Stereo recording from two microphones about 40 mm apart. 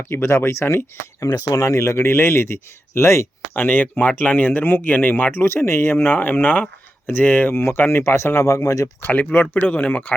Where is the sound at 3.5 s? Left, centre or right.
Left.